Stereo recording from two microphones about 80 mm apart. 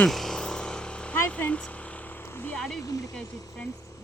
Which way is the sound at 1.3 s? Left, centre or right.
Centre.